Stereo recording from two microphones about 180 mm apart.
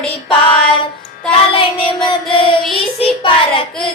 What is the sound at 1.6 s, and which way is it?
Music, 30° left (ahead or behind).